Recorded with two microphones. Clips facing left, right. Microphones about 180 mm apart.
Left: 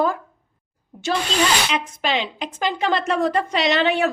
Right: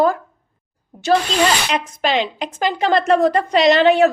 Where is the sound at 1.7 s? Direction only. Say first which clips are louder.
Right 4 dB; 40° right (ahead or behind).